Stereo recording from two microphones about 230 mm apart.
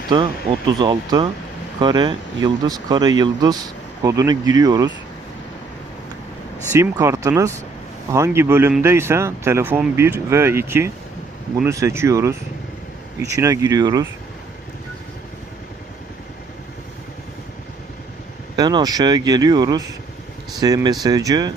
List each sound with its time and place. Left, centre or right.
0.8 s speech: centre
6.7 s speech: centre
18.5 s speech: centre